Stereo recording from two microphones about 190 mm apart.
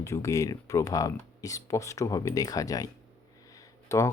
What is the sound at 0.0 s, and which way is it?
Speech, 15° left (ahead or behind).